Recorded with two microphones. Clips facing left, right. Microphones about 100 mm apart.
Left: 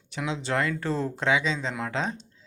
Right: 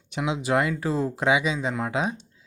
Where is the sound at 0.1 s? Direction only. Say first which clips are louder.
Right 4 dB; 15° right (ahead or behind).